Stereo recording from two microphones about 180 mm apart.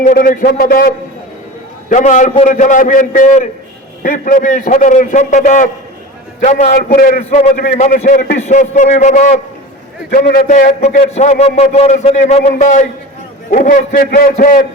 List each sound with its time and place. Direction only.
0.0 s a man's voice: 45° left (ahead or behind)
1.9 s a man's voice: 45° left (ahead or behind)
7.5 s a man's voice: 50° left (ahead or behind)
10.1 s a man's voice: 50° left (ahead or behind)